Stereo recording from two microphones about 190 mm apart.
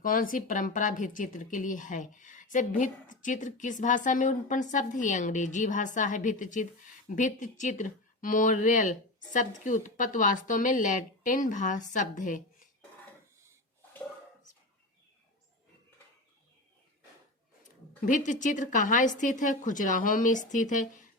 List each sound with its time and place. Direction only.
0.0 s speech: 45° left (ahead or behind)
18.0 s speech: 40° left (ahead or behind)